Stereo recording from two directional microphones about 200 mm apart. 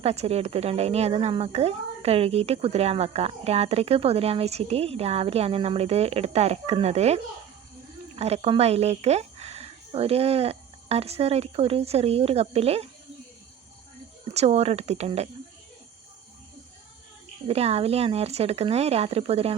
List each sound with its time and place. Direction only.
0.0 s speech: 30° right (ahead or behind)
14.3 s speech: 30° right (ahead or behind)
17.5 s speech: 30° right (ahead or behind)